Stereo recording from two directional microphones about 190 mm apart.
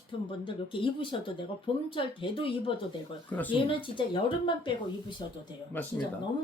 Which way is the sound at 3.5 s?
25° left (ahead or behind).